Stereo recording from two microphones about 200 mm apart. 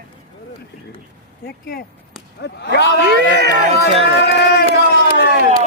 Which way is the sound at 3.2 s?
60° right (ahead or behind).